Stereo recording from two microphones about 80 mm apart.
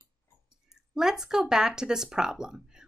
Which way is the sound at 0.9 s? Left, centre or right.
Centre.